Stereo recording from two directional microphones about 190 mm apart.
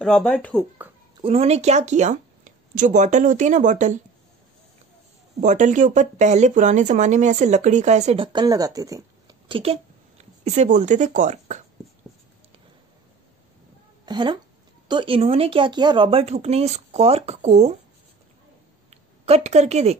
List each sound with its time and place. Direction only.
0.0 s speech: 5° left (ahead or behind)
1.2 s speech: 30° right (ahead or behind)
5.4 s speech: 40° right (ahead or behind)
14.0 s speech: 20° right (ahead or behind)
18.9 s a woman's voice: 35° right (ahead or behind)